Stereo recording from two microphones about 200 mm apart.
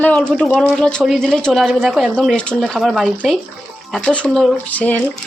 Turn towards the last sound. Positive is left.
turn(degrees=5)  # may be behind; listen again after turning